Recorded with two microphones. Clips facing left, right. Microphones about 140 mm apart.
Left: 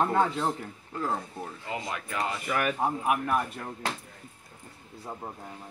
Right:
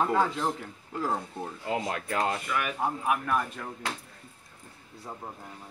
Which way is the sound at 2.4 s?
45° left (ahead or behind).